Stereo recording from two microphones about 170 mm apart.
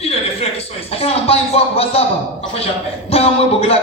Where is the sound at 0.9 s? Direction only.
35° left (ahead or behind).